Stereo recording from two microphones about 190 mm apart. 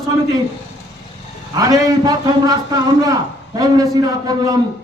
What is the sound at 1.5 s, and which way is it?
A man's voice, 20° right (ahead or behind).